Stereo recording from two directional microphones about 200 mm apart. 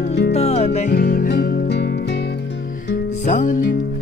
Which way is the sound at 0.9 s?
50° left (ahead or behind).